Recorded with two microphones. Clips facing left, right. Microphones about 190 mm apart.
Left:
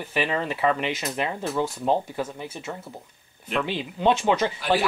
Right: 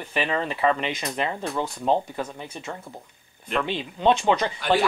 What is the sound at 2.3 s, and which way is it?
Speech, 5° left (ahead or behind).